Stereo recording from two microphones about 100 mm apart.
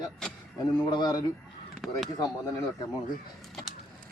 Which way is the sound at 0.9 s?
45° left (ahead or behind).